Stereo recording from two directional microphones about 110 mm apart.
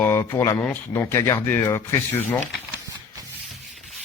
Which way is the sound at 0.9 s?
25° left (ahead or behind).